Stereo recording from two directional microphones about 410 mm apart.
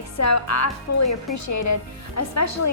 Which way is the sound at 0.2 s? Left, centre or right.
Left.